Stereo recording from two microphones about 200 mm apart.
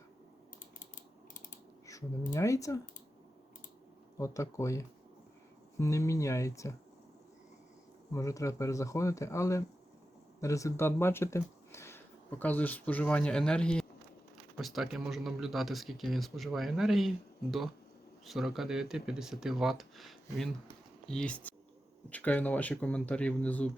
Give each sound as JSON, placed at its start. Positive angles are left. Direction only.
{"t": 1.9, "sound": "speech", "side_deg": 15}
{"t": 4.2, "sound": "speech", "side_deg": 15}
{"t": 8.1, "sound": "speech", "side_deg": 15}
{"t": 18.3, "sound": "speech", "side_deg": 0}